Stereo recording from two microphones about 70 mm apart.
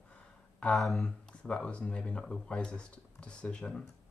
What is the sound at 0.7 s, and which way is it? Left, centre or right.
Speech, centre.